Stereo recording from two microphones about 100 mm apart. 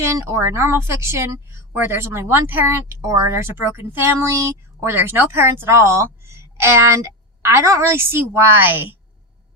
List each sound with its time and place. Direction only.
0.0 s a woman's voice: 30° right (ahead or behind)